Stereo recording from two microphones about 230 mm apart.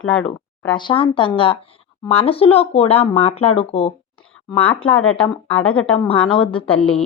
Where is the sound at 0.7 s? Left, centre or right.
Centre.